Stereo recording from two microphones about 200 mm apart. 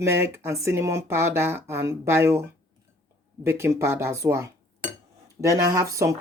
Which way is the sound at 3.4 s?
15° right (ahead or behind).